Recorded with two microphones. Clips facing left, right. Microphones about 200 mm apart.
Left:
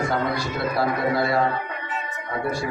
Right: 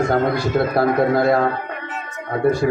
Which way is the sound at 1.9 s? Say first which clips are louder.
Right 4 dB; 50° right (ahead or behind).